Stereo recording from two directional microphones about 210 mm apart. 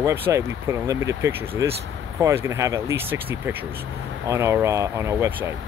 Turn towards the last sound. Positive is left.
turn(degrees=-10)  # may be behind; listen again after turning